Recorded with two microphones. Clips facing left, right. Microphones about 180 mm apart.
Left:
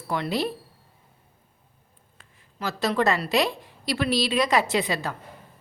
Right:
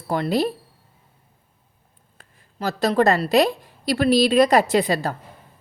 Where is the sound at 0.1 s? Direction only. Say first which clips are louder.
Right 5 dB; 40° right (ahead or behind).